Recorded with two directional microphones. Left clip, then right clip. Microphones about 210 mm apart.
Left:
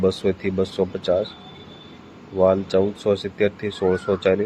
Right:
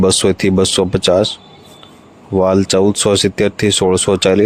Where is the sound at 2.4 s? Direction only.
50° right (ahead or behind).